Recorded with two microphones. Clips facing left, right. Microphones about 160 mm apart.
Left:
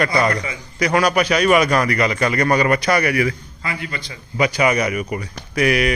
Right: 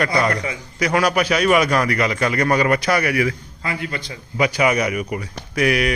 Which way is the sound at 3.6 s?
40° right (ahead or behind).